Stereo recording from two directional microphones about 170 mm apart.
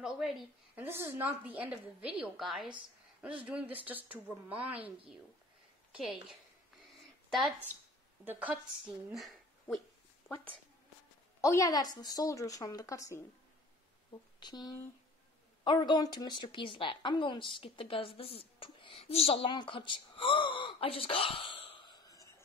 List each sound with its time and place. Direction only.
0.0 s a woman's voice: centre (ahead or behind)
0.8 s a woman's voice: 15° right (ahead or behind)
5.9 s a woman's voice: 5° right (ahead or behind)
11.4 s a woman's voice: 20° left (ahead or behind)
14.4 s a woman's voice: 25° left (ahead or behind)